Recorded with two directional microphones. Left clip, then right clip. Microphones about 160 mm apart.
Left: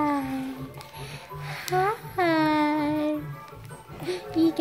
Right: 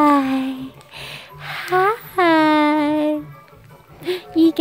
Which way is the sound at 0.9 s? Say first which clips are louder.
Right 8 dB; 55° right (ahead or behind).